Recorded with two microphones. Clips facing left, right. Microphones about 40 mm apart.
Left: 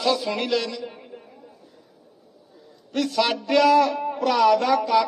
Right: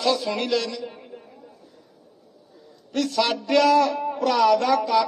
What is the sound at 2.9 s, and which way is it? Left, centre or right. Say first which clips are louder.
A man's voice: even; centre.